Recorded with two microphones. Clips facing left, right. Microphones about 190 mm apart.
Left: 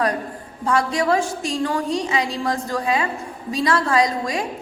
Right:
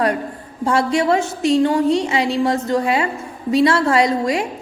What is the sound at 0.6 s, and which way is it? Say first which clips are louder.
A woman's voice: right 3 dB; 25° right (ahead or behind).